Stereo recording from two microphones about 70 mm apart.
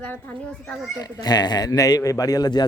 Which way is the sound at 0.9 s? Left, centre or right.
Left.